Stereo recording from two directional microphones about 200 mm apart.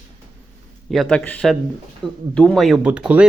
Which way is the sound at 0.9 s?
Centre (ahead or behind).